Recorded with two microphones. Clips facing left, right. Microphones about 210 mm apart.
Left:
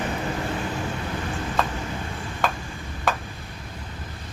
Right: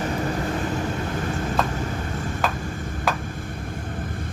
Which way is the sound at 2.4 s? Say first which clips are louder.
Left 1 dB; centre (ahead or behind).